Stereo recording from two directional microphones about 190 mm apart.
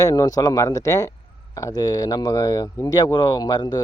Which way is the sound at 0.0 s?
20° left (ahead or behind).